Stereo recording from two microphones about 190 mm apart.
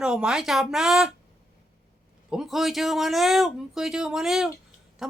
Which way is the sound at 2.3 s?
Centre (ahead or behind).